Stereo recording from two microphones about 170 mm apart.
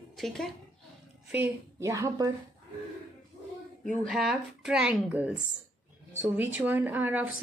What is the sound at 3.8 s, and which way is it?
Speech, 5° left (ahead or behind).